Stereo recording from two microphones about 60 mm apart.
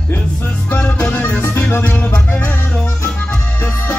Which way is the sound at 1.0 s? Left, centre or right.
Left.